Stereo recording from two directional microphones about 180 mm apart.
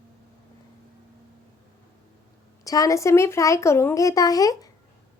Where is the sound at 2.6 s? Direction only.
20° left (ahead or behind).